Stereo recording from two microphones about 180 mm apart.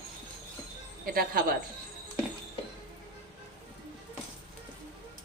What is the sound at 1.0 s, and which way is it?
Speech, 55° right (ahead or behind).